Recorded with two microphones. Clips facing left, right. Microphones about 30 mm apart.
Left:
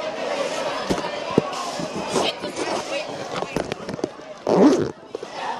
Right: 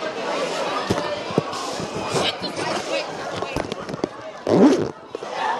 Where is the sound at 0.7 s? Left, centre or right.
Right.